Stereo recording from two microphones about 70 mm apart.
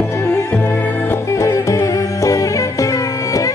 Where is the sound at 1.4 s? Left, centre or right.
Left.